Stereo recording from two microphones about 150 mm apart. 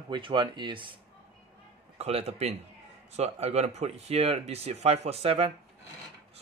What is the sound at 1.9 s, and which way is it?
Speech, 45° right (ahead or behind).